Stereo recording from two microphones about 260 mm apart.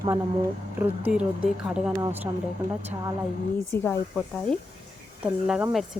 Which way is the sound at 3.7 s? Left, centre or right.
Centre.